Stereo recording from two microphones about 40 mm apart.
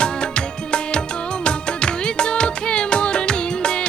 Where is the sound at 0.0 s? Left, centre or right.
Left.